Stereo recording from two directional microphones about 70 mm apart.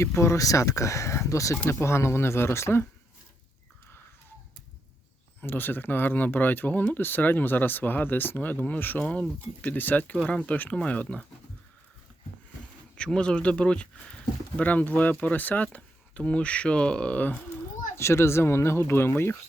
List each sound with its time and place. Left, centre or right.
0.0 s speech: left
5.4 s speech: left
13.0 s speech: centre
17.9 s speech: left